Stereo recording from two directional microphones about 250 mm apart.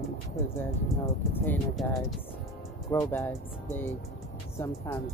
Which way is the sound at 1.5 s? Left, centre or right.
Centre.